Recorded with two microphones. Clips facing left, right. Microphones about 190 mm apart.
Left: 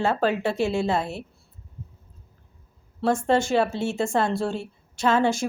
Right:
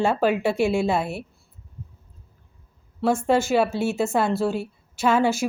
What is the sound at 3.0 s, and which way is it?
Speech, 10° right (ahead or behind).